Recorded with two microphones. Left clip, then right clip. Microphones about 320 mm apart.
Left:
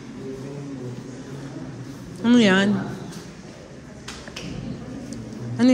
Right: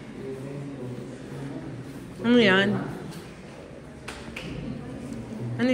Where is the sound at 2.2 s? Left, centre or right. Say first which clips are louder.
Left 2 dB; centre.